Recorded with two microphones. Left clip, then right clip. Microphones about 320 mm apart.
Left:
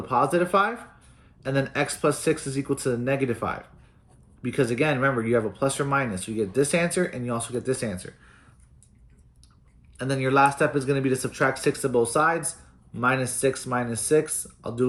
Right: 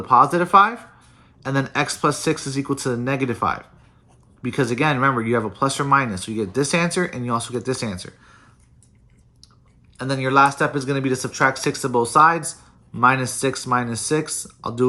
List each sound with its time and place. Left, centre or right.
0.0 s speech: centre
10.0 s speech: centre